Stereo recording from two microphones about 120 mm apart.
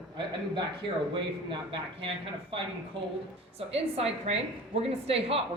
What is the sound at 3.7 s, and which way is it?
A woman's voice, 55° right (ahead or behind).